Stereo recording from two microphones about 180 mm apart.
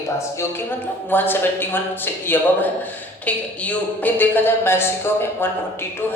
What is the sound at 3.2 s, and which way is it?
A man's voice, 10° left (ahead or behind).